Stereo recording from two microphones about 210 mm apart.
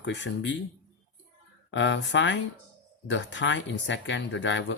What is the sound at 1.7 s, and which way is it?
Speech, 60° left (ahead or behind).